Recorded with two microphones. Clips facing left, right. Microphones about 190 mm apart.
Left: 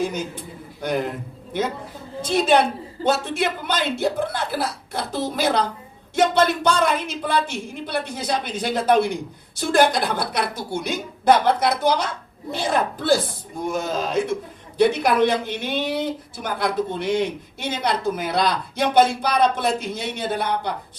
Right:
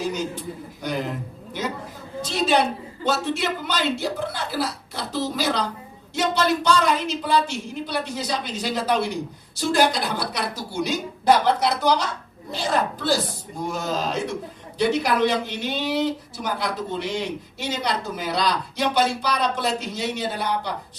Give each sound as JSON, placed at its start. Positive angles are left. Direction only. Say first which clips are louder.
{"t": 0.0, "sound": "a sound", "louder": "left 1 dB", "side_deg": 55}
{"t": 0.8, "sound": "speech", "louder": "left 4 dB", "side_deg": 55}
{"t": 2.2, "sound": "speech", "louder": "left 3 dB", "side_deg": 55}